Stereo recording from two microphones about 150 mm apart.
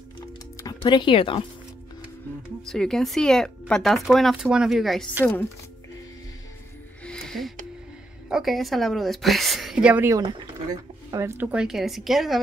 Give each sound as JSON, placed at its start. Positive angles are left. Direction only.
{"t": 0.6, "sound": "speech", "side_deg": 25}
{"t": 2.7, "sound": "speech", "side_deg": 5}
{"t": 7.1, "sound": "music", "side_deg": 5}
{"t": 8.3, "sound": "speech", "side_deg": 0}
{"t": 10.1, "sound": "speech", "side_deg": -30}
{"t": 11.1, "sound": "speech", "side_deg": -20}